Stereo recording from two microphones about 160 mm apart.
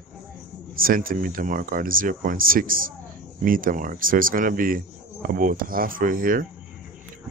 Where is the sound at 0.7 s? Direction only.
65° right (ahead or behind).